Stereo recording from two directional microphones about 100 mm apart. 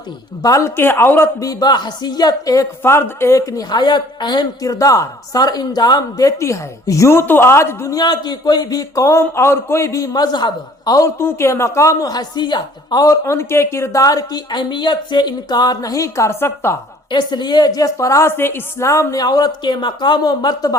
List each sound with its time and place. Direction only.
0.4 s speech: 35° left (ahead or behind)
0.8 s a man's voice: 20° left (ahead or behind)
1.4 s speech: 40° left (ahead or behind)
7.9 s speech: 45° left (ahead or behind)
10.9 s speech: 30° left (ahead or behind)
17.1 s speech: 50° left (ahead or behind)